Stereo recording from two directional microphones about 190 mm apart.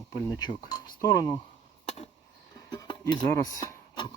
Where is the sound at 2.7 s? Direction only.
25° left (ahead or behind).